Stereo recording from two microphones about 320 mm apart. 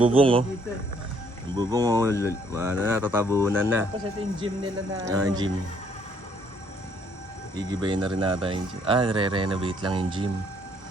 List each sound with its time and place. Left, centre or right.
0.0 s speech: centre
1.5 s speech: centre
7.5 s speech: centre